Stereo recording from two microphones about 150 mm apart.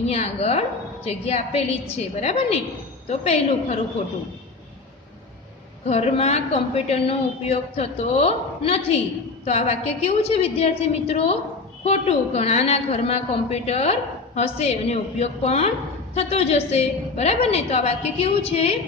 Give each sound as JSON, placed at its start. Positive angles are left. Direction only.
{"t": 0.0, "sound": "a woman's voice", "side_deg": 45}
{"t": 5.9, "sound": "a woman's voice", "side_deg": 45}